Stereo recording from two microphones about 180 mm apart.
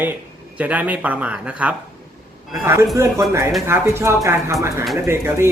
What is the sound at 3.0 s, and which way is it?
Speech, 15° right (ahead or behind).